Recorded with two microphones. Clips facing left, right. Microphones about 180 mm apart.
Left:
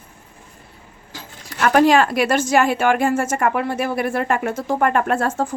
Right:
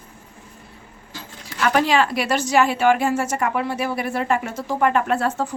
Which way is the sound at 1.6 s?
50° left (ahead or behind).